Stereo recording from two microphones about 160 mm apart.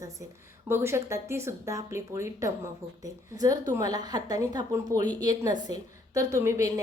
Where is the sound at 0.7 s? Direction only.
15° right (ahead or behind).